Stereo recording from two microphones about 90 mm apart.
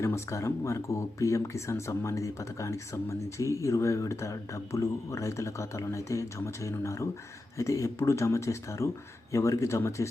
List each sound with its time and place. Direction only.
0.0 s speech: 30° left (ahead or behind)